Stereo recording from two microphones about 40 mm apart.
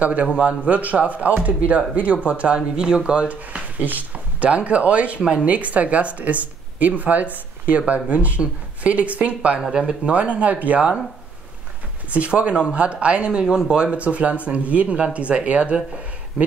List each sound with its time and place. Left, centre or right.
0.0 s speech: right
2.2 s speech: right
3.8 s a sound: right
4.5 s speech: right
9.7 s speech: right
10.1 s speech: right
12.3 s speech: right
13.9 s speech: right